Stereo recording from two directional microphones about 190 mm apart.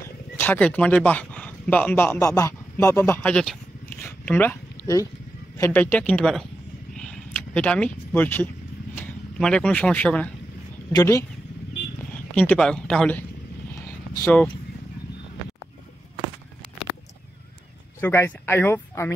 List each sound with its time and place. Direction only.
0.0 s speech: 10° left (ahead or behind)
6.9 s a sound: 5° left (ahead or behind)
8.9 s speech: 5° left (ahead or behind)
11.0 s speech: 15° left (ahead or behind)
12.4 s speech: 5° left (ahead or behind)
14.2 s speech: 5° left (ahead or behind)
18.0 s speech: 10° left (ahead or behind)